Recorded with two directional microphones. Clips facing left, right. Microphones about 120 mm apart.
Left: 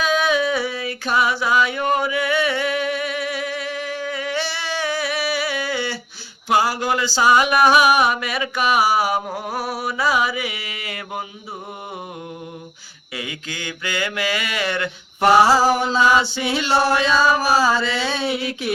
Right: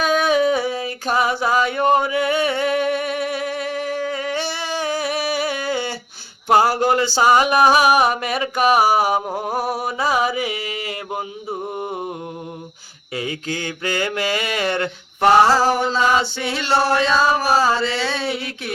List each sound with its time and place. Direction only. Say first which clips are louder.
0.0 s a sound: right 2 dB; 50° right (ahead or behind)
1.8 s music: right 3 dB; 30° right (ahead or behind); by 6.0 s 45° right (ahead or behind)
6.7 s mantra: right 4 dB; 45° right (ahead or behind)
7.3 s music: even; 35° right (ahead or behind)
9.1 s a sound: right 2 dB; 20° right (ahead or behind)
9.6 s music: even; 45° right (ahead or behind)
13.1 s music: right 6 dB; 40° right (ahead or behind)
15.2 s mantra: even; 5° left (ahead or behind)
17.0 s a sound: even; 30° right (ahead or behind)
17.3 s mantra: even; centre (ahead or behind)
17.7 s music: even; 30° right (ahead or behind)
18.0 s mantra: even; centre (ahead or behind)